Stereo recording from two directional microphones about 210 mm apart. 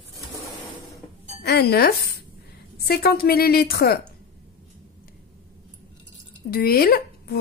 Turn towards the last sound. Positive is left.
turn(degrees=45)  # may be behind; listen again after turning